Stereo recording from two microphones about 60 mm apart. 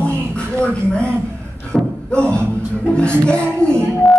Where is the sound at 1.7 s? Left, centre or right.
Centre.